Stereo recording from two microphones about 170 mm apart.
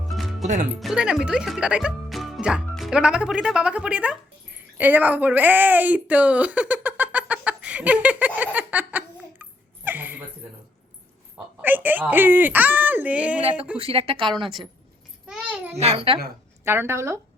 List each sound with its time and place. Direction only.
0.1 s music: centre (ahead or behind)
0.4 s speech: 45° right (ahead or behind)
0.8 s music: 5° right (ahead or behind)
11.6 s speech: 10° right (ahead or behind)
13.7 s a child's voice: 35° right (ahead or behind)
15.3 s a sound: 10° right (ahead or behind)
15.7 s a child's voice: 40° right (ahead or behind)
16.6 s speech: 15° right (ahead or behind)